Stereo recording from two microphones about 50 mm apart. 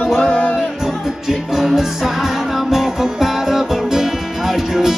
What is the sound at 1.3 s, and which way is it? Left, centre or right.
Music, centre.